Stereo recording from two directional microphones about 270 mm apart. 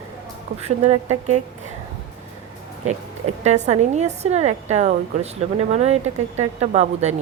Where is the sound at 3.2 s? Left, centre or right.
Right.